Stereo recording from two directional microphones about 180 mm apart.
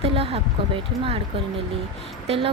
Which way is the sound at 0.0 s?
30° right (ahead or behind).